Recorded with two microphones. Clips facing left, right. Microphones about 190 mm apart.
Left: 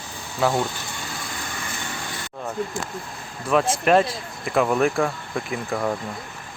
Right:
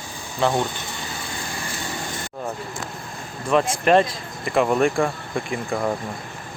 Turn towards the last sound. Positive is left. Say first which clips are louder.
# right 1 dB
turn(degrees=0)  # may be behind; listen again after turning